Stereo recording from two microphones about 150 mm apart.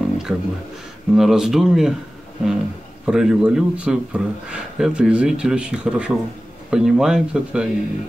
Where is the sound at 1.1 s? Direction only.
5° right (ahead or behind).